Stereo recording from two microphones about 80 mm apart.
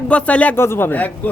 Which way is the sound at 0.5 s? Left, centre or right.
Left.